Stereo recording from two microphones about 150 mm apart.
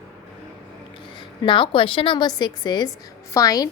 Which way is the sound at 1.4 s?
35° left (ahead or behind).